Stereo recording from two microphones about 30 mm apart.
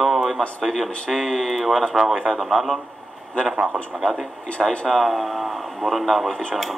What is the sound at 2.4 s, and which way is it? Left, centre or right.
Speech, centre.